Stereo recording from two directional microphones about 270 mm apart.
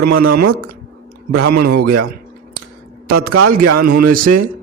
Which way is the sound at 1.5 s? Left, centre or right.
Right.